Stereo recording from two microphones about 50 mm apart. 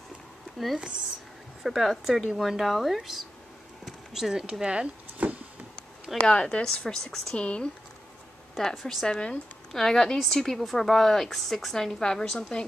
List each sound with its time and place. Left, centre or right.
1.6 s a woman's voice: centre
3.8 s a sound: centre
4.6 s speech: centre
5.2 s a sound: right
6.2 s a woman's voice: centre
7.3 s a woman's voice: left
8.5 s a woman's voice: centre